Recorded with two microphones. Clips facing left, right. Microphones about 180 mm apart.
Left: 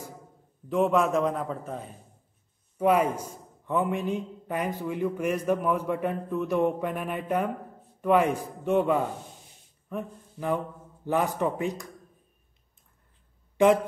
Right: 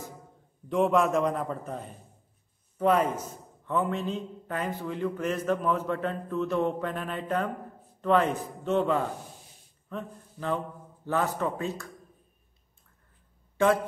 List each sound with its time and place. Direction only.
0.7 s a man's voice: centre (ahead or behind); by 11.9 s 15° left (ahead or behind)